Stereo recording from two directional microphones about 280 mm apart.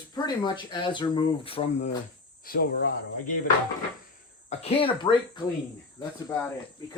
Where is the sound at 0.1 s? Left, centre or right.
Centre.